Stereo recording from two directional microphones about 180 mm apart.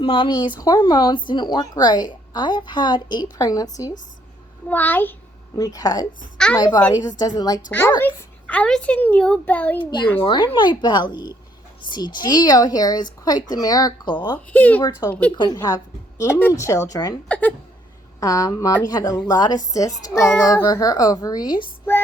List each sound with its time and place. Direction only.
0.0 s a woman's voice: 25° left (ahead or behind)
6.3 s a woman's voice: 5° left (ahead or behind)
7.2 s a woman's voice: 20° left (ahead or behind)
10.2 s a woman's voice: 25° left (ahead or behind)
14.5 s a woman's voice: 10° left (ahead or behind)
17.2 s a woman's voice: 5° left (ahead or behind)
18.2 s a woman's voice: 20° left (ahead or behind)